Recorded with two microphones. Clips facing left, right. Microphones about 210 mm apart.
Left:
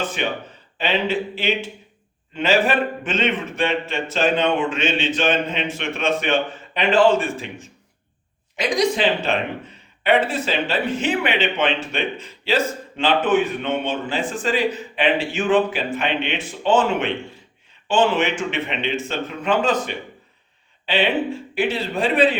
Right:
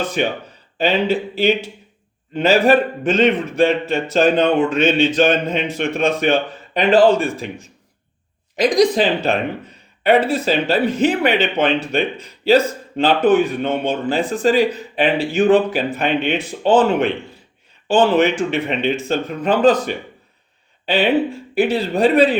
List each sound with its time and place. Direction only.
0.2 s speech: 45° right (ahead or behind)
8.5 s speech: 35° right (ahead or behind)
21.5 s speech: 40° right (ahead or behind)